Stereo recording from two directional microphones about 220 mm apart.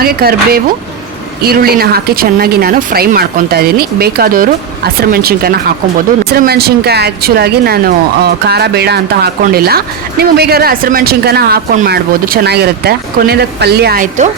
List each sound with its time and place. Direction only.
0.0 s speech: 45° right (ahead or behind)